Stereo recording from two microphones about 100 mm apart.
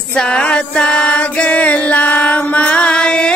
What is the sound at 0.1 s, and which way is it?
Music, 10° left (ahead or behind).